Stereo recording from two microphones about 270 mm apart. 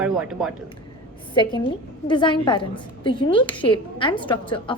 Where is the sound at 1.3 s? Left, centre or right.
Centre.